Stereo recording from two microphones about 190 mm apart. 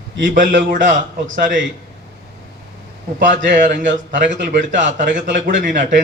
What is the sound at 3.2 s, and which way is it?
A man's voice, 45° right (ahead or behind).